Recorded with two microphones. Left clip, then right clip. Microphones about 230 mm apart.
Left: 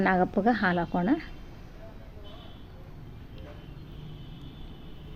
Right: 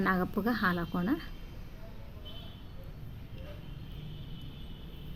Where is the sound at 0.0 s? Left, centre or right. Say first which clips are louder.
Left 7 dB; centre.